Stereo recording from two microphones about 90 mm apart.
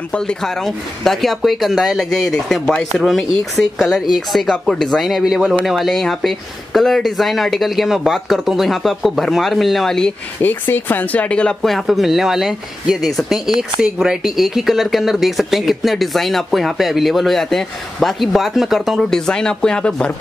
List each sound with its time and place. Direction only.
0.1 s speech: 10° left (ahead or behind)
10.4 s speech: 20° left (ahead or behind)